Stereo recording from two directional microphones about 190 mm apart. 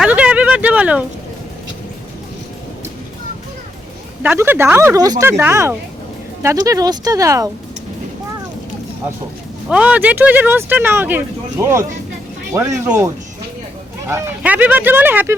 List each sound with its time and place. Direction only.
0.0 s a sound: 5° right (ahead or behind)
4.2 s speech: 10° right (ahead or behind)
9.6 s speech: 5° right (ahead or behind)
14.1 s speech: 10° right (ahead or behind)